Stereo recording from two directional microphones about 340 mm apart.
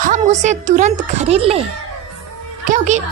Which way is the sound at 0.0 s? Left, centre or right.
Right.